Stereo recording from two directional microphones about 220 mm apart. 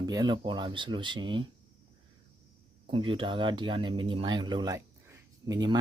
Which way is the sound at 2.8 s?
25° right (ahead or behind).